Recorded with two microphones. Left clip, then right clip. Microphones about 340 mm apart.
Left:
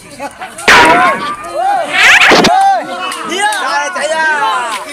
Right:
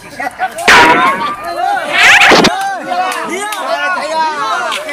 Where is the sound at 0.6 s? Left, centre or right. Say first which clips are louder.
Left 1 dB; centre.